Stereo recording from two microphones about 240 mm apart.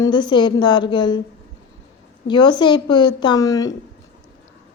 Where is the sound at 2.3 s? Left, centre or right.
Centre.